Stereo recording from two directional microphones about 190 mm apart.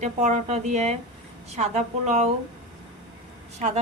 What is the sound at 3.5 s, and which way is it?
Speech, 35° right (ahead or behind).